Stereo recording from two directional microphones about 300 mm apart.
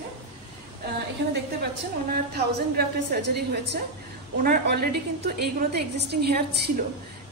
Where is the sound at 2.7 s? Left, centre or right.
Right.